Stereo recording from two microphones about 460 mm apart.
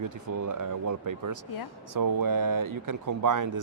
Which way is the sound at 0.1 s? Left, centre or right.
Right.